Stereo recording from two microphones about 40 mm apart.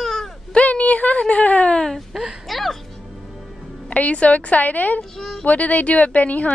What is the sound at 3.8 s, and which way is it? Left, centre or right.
A woman's voice, left.